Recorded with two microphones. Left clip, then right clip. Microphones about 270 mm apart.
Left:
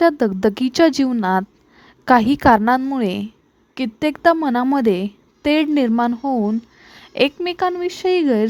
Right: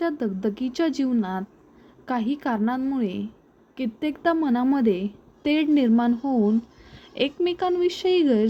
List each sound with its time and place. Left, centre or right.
0.0 s a woman's voice: left